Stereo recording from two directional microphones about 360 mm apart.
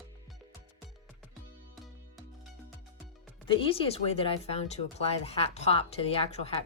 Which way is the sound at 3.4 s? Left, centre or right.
Centre.